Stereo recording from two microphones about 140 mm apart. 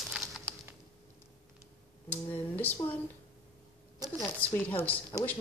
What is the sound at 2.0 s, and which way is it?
Speech, 10° left (ahead or behind).